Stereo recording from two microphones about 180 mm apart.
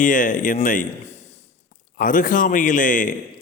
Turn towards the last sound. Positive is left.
turn(degrees=45)  # may be behind; listen again after turning